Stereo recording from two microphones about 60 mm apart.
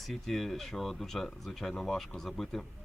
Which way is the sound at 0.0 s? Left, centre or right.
Centre.